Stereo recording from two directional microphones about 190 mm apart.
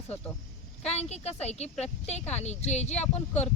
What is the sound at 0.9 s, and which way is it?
Speech, 35° left (ahead or behind).